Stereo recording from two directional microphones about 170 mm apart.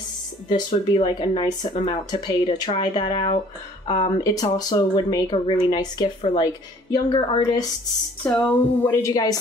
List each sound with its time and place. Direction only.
0.5 s speech: 30° left (ahead or behind)
8.2 s a woman's voice: 5° left (ahead or behind)
9.1 s speech: 20° left (ahead or behind)